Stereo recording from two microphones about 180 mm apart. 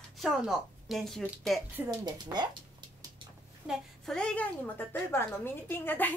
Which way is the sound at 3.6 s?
5° left (ahead or behind).